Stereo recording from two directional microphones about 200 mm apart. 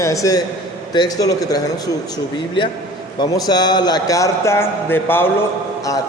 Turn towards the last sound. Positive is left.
turn(degrees=10)  # may be behind; listen again after turning